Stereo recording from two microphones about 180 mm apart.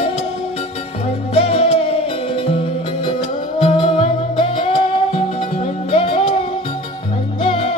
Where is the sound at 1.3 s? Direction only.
35° left (ahead or behind).